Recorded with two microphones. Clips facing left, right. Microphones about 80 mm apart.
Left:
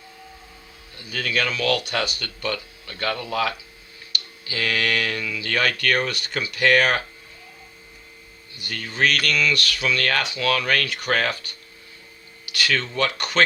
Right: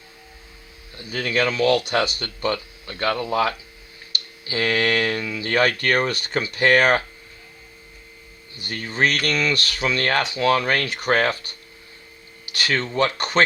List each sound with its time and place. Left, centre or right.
0.9 s speech: right
8.5 s speech: right